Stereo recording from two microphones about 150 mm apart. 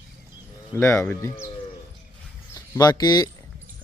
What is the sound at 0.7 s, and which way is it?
Speech, 15° left (ahead or behind).